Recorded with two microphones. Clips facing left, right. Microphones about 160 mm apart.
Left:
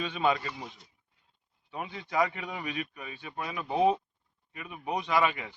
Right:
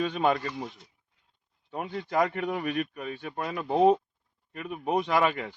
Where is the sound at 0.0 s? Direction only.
45° right (ahead or behind).